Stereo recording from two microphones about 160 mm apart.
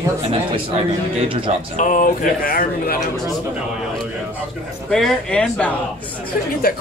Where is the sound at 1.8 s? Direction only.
55° left (ahead or behind).